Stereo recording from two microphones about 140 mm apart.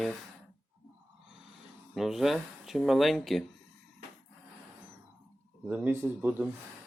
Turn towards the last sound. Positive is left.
turn(degrees=-15)  # may be behind; listen again after turning